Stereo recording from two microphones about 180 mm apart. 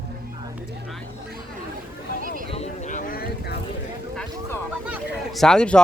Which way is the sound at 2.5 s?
40° left (ahead or behind).